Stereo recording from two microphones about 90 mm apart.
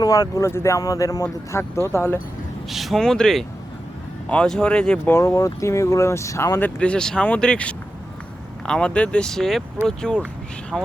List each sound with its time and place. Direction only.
0.0 s speech: 45° left (ahead or behind)
1.5 s speech: 30° left (ahead or behind)
2.6 s speech: centre (ahead or behind)
5.1 s speech: 35° left (ahead or behind)
6.6 s speech: 10° left (ahead or behind)